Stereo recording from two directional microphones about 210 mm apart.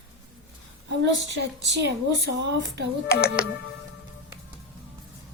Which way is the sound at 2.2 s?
55° right (ahead or behind).